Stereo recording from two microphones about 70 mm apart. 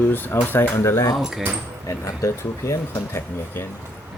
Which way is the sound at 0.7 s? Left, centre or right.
Left.